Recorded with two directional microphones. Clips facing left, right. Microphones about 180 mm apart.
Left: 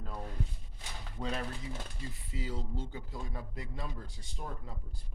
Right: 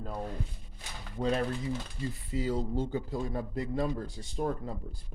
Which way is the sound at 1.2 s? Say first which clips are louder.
Right 8 dB; 40° right (ahead or behind).